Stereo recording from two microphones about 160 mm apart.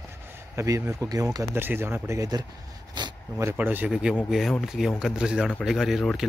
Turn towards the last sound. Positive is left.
turn(degrees=0)  # may be behind; listen again after turning